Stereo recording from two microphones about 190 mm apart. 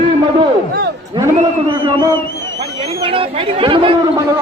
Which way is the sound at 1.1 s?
20° right (ahead or behind).